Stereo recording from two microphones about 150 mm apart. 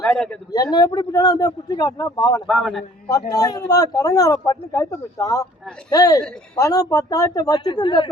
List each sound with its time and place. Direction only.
0.0 s a man's voice: 10° left (ahead or behind)
0.5 s speech: 25° left (ahead or behind)
2.5 s a man's voice: centre (ahead or behind)
3.1 s speech: 25° left (ahead or behind)